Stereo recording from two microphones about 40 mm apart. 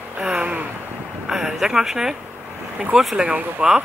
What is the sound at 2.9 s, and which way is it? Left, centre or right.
Speech, right.